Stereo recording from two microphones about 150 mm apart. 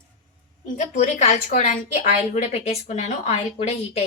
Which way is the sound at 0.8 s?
55° left (ahead or behind).